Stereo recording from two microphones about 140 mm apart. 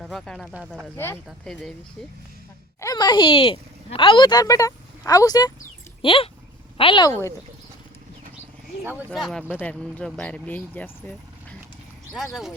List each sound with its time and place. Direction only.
0.0 s speech: centre (ahead or behind)
0.9 s speech: 15° left (ahead or behind)
1.5 s speech: 5° left (ahead or behind)
2.8 s speech: 30° left (ahead or behind)
6.0 s a woman's voice: 40° left (ahead or behind)
7.1 s speech: 20° left (ahead or behind)
8.8 s speech: 15° right (ahead or behind)
9.1 s speech: centre (ahead or behind)
12.1 s speech: centre (ahead or behind)